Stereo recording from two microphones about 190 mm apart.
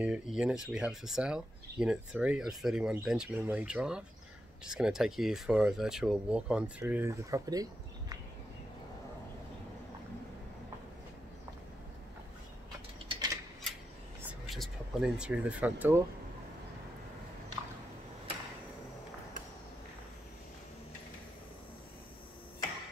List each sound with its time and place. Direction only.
0.0 s speech: 5° right (ahead or behind)
13.1 s typewriter: 20° right (ahead or behind)
14.5 s speech: centre (ahead or behind)